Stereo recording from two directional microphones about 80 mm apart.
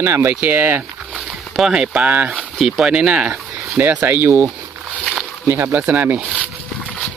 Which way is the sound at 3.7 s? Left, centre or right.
Right.